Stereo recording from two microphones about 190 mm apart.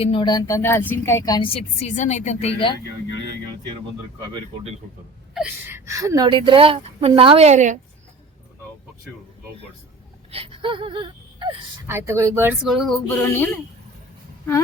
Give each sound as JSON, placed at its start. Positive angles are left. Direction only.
{"t": 0.0, "sound": "speech", "side_deg": 25}
{"t": 4.3, "sound": "a woman's voice", "side_deg": -25}
{"t": 5.3, "sound": "a woman's voice", "side_deg": -10}
{"t": 10.3, "sound": "gasp", "side_deg": -30}
{"t": 11.9, "sound": "speech", "side_deg": -15}
{"t": 12.6, "sound": "a sound", "side_deg": 0}
{"t": 13.1, "sound": "speech", "side_deg": 10}